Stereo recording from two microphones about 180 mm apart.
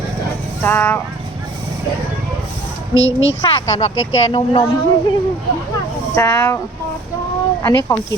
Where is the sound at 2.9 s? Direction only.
90° left.